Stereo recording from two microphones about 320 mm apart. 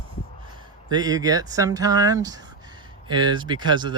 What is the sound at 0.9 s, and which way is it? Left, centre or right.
Speech, centre.